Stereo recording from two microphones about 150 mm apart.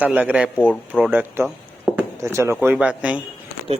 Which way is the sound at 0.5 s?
10° left (ahead or behind).